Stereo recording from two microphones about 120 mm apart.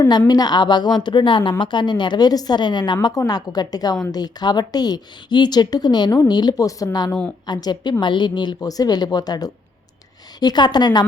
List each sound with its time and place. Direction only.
0.3 s a woman's voice: 35° left (ahead or behind)
7.1 s a woman's voice: 10° left (ahead or behind)
7.4 s a woman's voice: 35° left (ahead or behind)